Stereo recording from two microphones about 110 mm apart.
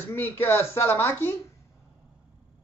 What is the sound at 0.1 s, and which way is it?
Speech, 20° left (ahead or behind).